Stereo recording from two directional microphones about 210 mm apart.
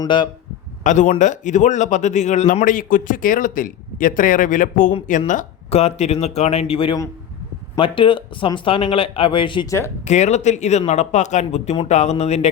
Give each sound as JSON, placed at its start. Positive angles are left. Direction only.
{"t": 0.0, "sound": "speech", "side_deg": 20}
{"t": 0.9, "sound": "speech", "side_deg": 35}
{"t": 10.1, "sound": "speech", "side_deg": 35}